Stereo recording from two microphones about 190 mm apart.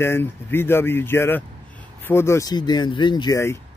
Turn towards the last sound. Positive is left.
turn(degrees=15)  # may be behind; listen again after turning